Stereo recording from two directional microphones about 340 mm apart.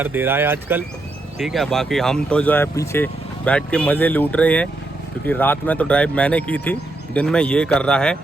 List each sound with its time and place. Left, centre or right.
0.0 s speech: centre